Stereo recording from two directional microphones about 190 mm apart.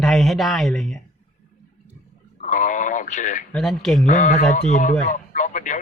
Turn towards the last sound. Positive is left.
turn(degrees=40)  # may be behind; listen again after turning